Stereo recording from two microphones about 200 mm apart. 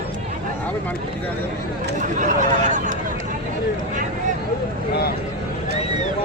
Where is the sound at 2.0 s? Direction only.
40° right (ahead or behind).